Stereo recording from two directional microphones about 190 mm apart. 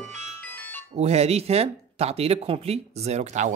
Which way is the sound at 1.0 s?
35° right (ahead or behind).